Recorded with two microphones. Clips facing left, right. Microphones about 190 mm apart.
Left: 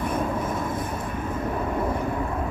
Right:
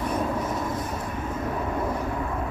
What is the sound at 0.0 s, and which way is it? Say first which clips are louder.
Vehicle: even; 50° left (ahead or behind).